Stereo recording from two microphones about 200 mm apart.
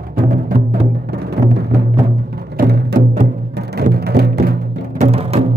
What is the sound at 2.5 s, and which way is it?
Music, 50° right (ahead or behind).